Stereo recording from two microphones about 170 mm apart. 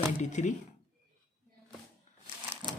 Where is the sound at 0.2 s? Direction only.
45° left (ahead or behind).